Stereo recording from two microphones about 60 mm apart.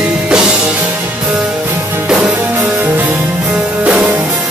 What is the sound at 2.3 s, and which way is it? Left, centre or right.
Music, right.